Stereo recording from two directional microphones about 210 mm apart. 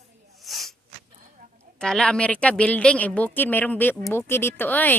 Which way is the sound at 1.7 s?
5° left (ahead or behind).